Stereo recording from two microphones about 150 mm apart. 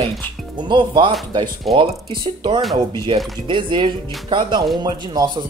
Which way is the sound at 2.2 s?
30° right (ahead or behind).